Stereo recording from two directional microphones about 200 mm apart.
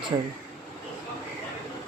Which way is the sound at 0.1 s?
20° right (ahead or behind).